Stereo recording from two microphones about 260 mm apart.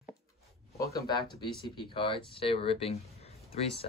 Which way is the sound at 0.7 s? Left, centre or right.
Centre.